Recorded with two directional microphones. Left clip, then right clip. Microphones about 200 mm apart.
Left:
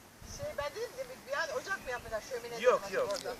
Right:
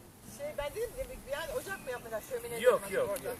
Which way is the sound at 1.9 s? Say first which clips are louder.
Even; 20° right (ahead or behind).